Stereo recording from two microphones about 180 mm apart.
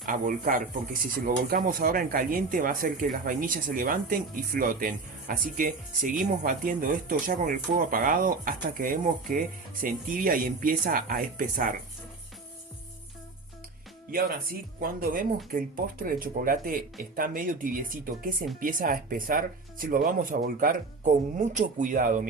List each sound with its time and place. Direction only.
0.0 s speech: 50° right (ahead or behind)
14.1 s speech: 55° right (ahead or behind)